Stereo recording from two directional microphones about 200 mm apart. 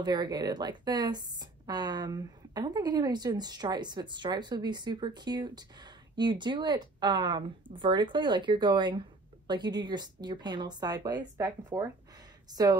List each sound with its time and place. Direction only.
0.0 s speech: 20° right (ahead or behind)